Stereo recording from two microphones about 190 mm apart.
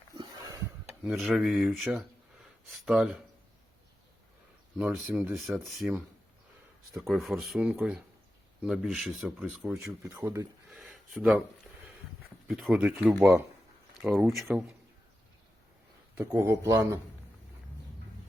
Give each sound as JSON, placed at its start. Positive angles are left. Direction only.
{"t": 0.2, "sound": "a sound", "side_deg": -20}
{"t": 1.0, "sound": "speech", "side_deg": -5}
{"t": 4.8, "sound": "speech", "side_deg": -5}
{"t": 5.5, "sound": "speech", "side_deg": 0}
{"t": 10.7, "sound": "a sound", "side_deg": 0}
{"t": 12.5, "sound": "speech", "side_deg": -5}
{"t": 16.1, "sound": "speech", "side_deg": -15}